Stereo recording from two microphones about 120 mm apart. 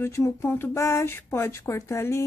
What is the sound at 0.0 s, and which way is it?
Speech, 20° left (ahead or behind).